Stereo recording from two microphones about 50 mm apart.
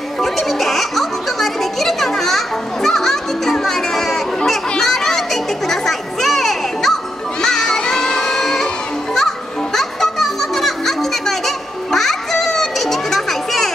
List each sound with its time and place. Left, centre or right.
0.2 s music: centre
4.6 s children playing: centre
7.4 s music: centre